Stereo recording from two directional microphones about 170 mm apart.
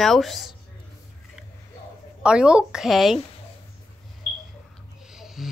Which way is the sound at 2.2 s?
5° right (ahead or behind).